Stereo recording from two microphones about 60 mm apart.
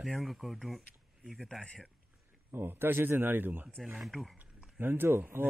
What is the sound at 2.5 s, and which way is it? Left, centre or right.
Speech, right.